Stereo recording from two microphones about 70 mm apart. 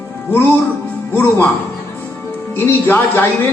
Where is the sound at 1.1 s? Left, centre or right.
Left.